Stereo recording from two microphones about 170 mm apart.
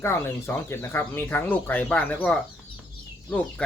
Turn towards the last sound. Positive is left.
turn(degrees=5)  # may be behind; listen again after turning